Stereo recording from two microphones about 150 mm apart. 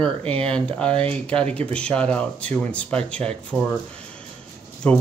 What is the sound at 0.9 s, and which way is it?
Speech, 40° right (ahead or behind).